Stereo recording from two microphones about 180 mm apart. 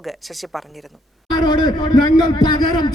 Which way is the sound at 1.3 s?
25° left (ahead or behind).